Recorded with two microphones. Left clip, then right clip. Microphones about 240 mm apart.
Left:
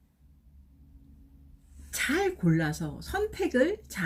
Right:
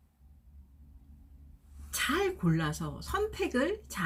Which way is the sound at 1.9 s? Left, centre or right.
Centre.